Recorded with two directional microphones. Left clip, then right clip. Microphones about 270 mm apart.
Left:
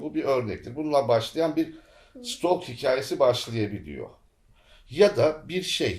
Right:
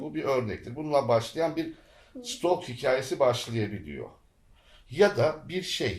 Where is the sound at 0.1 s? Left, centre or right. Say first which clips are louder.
Left 3 dB; left.